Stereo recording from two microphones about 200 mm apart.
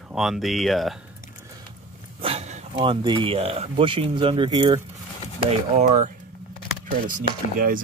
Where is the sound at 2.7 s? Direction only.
25° right (ahead or behind).